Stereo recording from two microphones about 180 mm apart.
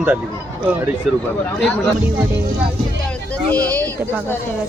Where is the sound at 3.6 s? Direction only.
20° right (ahead or behind).